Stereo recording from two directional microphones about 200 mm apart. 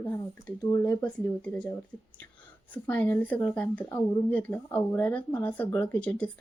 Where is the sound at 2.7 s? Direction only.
10° left (ahead or behind).